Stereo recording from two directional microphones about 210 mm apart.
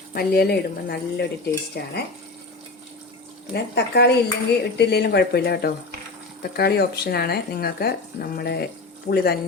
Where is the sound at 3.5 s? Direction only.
50° left (ahead or behind).